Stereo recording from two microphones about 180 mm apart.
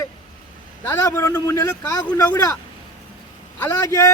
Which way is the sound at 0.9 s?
10° left (ahead or behind).